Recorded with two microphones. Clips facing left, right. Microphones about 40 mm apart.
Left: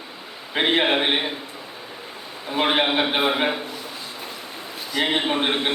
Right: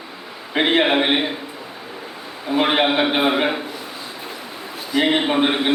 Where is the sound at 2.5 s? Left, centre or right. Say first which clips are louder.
Right 3 dB; centre.